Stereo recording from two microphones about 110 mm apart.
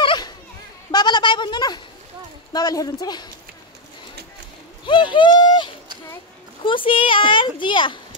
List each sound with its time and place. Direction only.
0.0 s children playing: 50° left (ahead or behind)
0.9 s a sound: 40° left (ahead or behind)
2.5 s speech: 35° left (ahead or behind)
4.8 s a child's voice: 45° left (ahead or behind)